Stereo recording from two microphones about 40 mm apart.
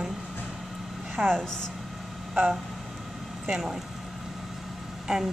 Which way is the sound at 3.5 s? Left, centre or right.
Centre.